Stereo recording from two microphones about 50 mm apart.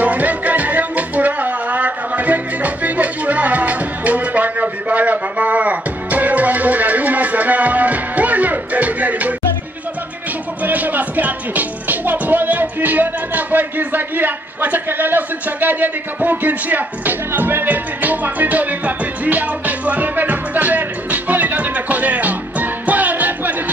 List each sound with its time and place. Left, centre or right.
0.0 s music: right
10.6 s music: right
17.6 s music: right